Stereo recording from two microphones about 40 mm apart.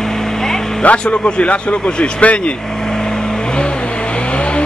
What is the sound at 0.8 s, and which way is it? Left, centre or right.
A man's voice, left.